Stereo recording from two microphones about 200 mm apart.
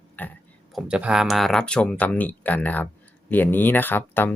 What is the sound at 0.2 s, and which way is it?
Speech, 5° left (ahead or behind).